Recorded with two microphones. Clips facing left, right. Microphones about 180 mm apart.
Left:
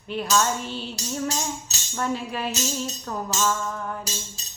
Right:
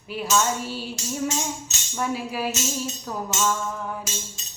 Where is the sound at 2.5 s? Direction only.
35° left (ahead or behind).